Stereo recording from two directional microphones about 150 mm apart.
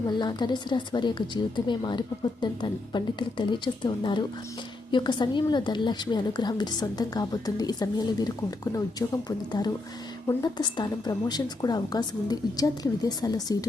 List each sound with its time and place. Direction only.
0.1 s a woman's voice: 30° left (ahead or behind)